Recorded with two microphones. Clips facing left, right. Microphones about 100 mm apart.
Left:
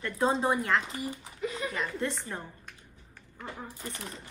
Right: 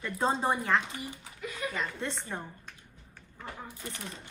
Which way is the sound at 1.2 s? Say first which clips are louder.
Left 3 dB; 30° left (ahead or behind).